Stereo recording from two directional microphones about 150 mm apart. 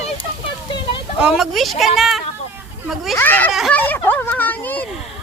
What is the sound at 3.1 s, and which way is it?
Speech, 10° left (ahead or behind).